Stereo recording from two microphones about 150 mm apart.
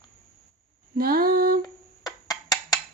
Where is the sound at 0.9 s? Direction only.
80° right.